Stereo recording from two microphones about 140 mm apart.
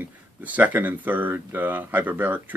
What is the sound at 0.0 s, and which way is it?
Speech, 10° right (ahead or behind).